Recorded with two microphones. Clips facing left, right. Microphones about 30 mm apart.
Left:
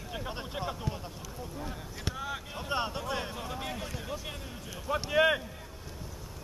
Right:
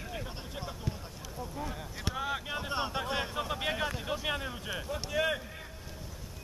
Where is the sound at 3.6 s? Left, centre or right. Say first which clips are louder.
Right 5 dB; right.